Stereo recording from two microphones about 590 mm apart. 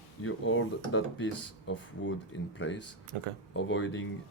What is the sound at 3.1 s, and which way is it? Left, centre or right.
Speech, right.